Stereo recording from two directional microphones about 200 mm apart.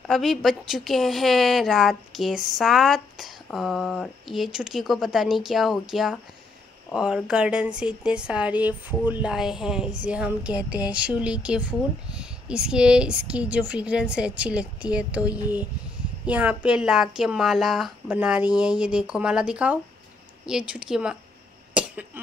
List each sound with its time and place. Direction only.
0.1 s a woman's voice: centre (ahead or behind)
21.7 s cough: 5° right (ahead or behind)